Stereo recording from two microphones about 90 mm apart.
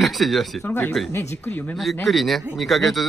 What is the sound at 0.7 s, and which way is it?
Speech, 20° left (ahead or behind).